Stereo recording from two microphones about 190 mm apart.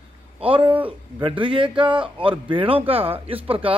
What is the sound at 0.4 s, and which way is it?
Speech, 30° right (ahead or behind).